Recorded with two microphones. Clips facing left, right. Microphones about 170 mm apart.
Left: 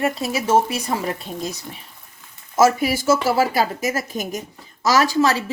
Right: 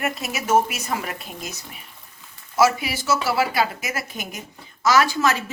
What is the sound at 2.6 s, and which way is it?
A woman's voice, 45° left (ahead or behind).